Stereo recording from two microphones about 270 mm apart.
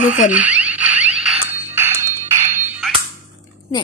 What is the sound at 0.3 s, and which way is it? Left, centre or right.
Rodents, centre.